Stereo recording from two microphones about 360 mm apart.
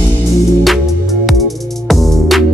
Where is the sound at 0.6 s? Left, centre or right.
Centre.